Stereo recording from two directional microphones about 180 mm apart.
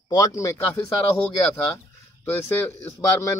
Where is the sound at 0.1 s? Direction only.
20° left (ahead or behind).